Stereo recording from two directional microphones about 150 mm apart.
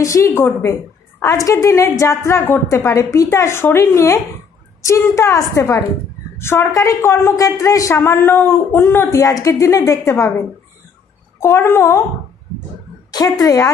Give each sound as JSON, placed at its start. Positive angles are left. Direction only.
{"t": 0.0, "sound": "a woman's voice", "side_deg": 20}
{"t": 11.3, "sound": "speech", "side_deg": 15}
{"t": 13.1, "sound": "a woman's voice", "side_deg": 25}